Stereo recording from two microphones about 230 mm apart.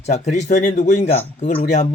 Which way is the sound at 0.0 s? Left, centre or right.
Left.